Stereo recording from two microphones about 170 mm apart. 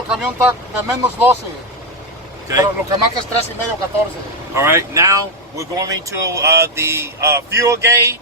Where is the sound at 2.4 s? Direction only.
20° right (ahead or behind).